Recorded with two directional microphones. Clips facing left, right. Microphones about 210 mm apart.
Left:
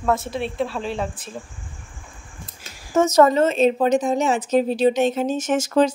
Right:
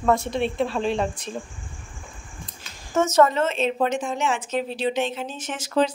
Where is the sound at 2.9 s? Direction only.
35° left (ahead or behind).